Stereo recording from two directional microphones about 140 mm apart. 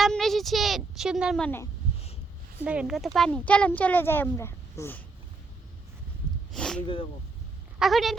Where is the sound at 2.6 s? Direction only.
10° right (ahead or behind); by 5.0 s 15° left (ahead or behind).